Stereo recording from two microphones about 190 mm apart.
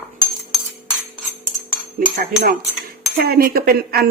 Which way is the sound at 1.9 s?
50° right (ahead or behind).